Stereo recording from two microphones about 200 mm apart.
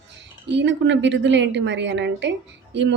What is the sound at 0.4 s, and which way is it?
A woman's voice, 60° right (ahead or behind).